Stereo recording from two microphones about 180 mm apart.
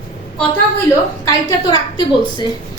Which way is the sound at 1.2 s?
20° left (ahead or behind).